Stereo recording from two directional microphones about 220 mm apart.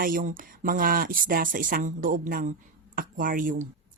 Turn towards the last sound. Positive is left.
turn(degrees=-40)  # may be behind; listen again after turning